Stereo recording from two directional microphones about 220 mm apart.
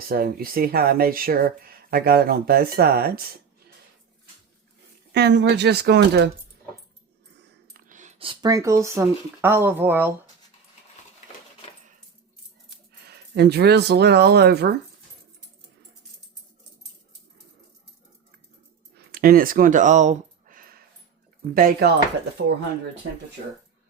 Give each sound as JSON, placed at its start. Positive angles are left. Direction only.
{"t": 0.1, "sound": "speech", "side_deg": -40}
{"t": 5.1, "sound": "speech", "side_deg": -50}
{"t": 7.7, "sound": "speech", "side_deg": -35}
{"t": 12.9, "sound": "speech", "side_deg": -45}
{"t": 18.9, "sound": "a sound", "side_deg": -40}
{"t": 21.5, "sound": "speech", "side_deg": -45}